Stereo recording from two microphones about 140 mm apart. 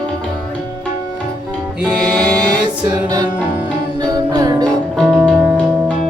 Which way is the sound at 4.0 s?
25° right (ahead or behind).